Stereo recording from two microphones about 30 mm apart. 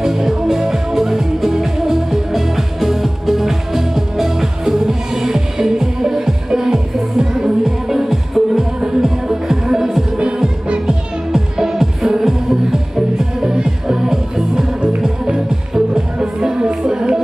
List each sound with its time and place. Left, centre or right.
0.0 s music: centre
11.3 s music: centre
15.7 s music: centre